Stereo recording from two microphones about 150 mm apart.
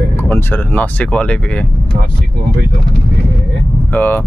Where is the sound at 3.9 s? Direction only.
10° left (ahead or behind).